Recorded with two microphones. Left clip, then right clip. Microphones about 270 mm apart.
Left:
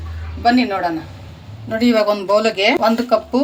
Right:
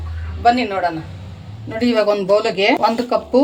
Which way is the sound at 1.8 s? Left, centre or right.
Left.